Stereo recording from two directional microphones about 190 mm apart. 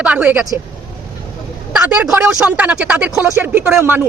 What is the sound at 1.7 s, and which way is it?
Speech, 5° right (ahead or behind).